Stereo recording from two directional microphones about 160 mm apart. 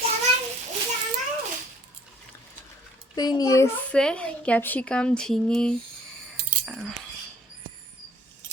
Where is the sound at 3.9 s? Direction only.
5° left (ahead or behind).